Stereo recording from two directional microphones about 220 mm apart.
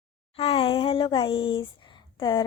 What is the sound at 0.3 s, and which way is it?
Speech, 25° left (ahead or behind).